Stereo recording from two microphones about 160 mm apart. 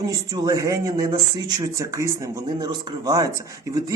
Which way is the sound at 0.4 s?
20° right (ahead or behind).